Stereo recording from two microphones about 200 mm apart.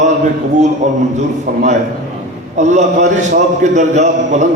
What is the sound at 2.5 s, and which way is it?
A man's voice, 35° right (ahead or behind).